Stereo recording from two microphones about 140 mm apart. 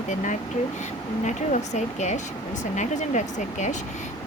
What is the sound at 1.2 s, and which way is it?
Speech, 55° left (ahead or behind).